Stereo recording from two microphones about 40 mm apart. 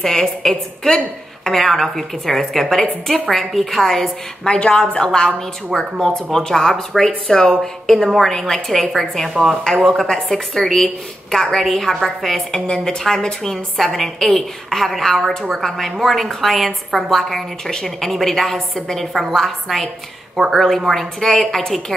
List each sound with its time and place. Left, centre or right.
0.0 s a woman's voice: centre
4.5 s a woman's voice: left